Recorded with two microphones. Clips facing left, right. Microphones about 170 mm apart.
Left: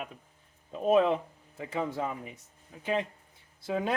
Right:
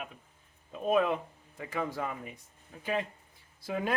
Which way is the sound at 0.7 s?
30° left (ahead or behind).